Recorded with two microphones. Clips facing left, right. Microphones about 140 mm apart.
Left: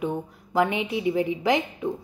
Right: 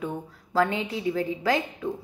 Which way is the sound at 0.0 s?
20° left (ahead or behind).